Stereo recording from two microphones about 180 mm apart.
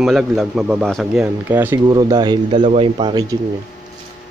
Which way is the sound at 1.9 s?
20° right (ahead or behind).